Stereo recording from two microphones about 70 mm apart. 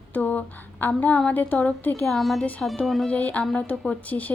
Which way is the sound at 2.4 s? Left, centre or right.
Centre.